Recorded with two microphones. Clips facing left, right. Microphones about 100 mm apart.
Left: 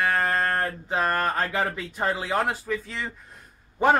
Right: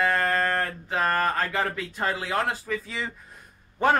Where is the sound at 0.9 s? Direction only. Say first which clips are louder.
Even; 5° left (ahead or behind).